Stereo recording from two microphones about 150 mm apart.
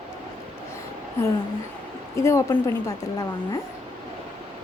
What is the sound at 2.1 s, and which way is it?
Speech, 20° left (ahead or behind).